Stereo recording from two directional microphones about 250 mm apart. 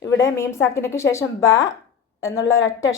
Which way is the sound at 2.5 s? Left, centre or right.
Left.